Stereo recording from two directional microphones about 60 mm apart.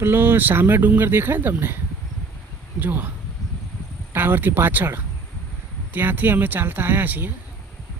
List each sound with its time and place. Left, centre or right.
0.0 s speech: right
2.8 s speech: right
4.1 s speech: right